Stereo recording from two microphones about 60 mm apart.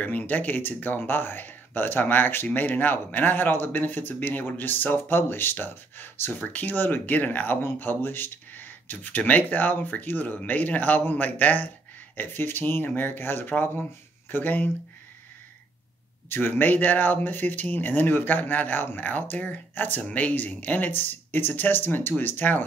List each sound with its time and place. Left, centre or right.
0.0 s speech: left
16.3 s speech: left